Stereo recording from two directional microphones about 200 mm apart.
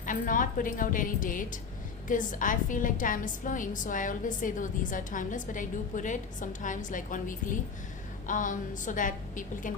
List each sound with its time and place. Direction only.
0.0 s a woman's voice: 40° left (ahead or behind)